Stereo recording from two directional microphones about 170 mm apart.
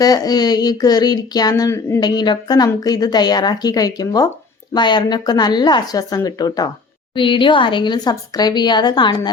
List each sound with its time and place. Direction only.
0.0 s speech: 20° left (ahead or behind)